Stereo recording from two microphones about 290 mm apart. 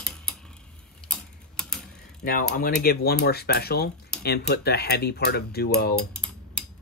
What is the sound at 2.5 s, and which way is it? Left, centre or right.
Speech, left.